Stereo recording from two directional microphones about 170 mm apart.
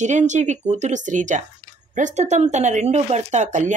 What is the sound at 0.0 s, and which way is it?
Speech, 45° right (ahead or behind).